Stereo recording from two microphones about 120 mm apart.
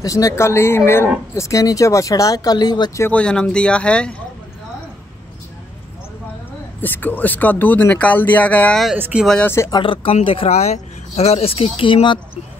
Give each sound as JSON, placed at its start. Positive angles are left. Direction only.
{"t": 0.0, "sound": "speech", "side_deg": 30}
{"t": 3.1, "sound": "speech", "side_deg": 10}
{"t": 6.8, "sound": "speech", "side_deg": 15}
{"t": 8.9, "sound": "speech", "side_deg": -15}
{"t": 9.2, "sound": "speech", "side_deg": 5}
{"t": 9.7, "sound": "speech", "side_deg": 45}